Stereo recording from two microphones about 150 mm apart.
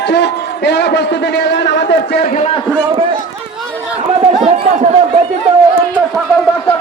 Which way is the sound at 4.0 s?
45° right (ahead or behind).